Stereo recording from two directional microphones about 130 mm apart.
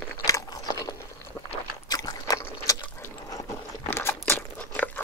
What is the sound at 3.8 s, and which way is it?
Crunch, 20° left (ahead or behind).